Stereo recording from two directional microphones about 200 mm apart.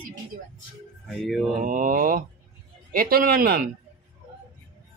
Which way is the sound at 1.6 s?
40° right (ahead or behind).